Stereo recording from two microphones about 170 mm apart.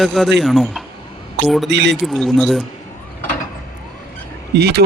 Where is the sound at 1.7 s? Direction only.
90° right.